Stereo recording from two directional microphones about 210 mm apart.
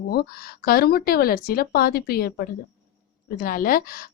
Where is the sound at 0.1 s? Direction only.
50° left (ahead or behind).